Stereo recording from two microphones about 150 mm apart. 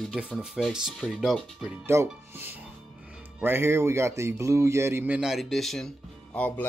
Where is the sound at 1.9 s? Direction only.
15° right (ahead or behind).